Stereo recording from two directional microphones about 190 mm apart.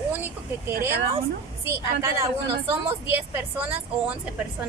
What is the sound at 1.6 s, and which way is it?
Speech, 15° right (ahead or behind).